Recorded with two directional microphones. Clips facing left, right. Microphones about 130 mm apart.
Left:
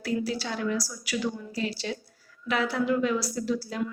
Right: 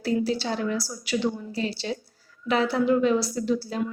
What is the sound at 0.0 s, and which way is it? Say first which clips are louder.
A woman's voice: right 4 dB; 25° right (ahead or behind).